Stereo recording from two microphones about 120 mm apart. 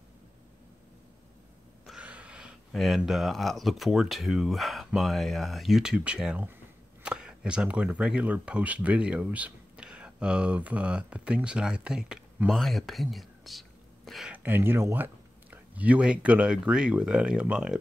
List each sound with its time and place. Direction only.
1.9 s a sound: 10° right (ahead or behind)
2.7 s speech: centre (ahead or behind)
14.3 s speech: 15° right (ahead or behind)